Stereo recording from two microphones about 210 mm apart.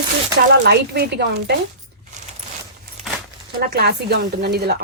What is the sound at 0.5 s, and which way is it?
Speech, 55° right (ahead or behind).